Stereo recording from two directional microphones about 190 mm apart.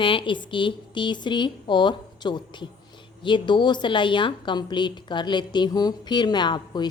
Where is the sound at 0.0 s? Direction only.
25° left (ahead or behind).